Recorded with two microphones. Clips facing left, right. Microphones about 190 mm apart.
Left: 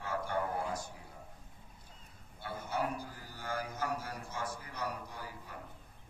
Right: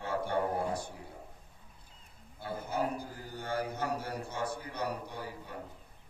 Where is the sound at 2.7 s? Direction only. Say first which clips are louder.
Right 2 dB; 30° right (ahead or behind).